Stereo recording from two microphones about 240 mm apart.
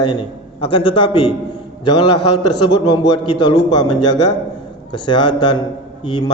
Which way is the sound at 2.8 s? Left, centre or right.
Centre.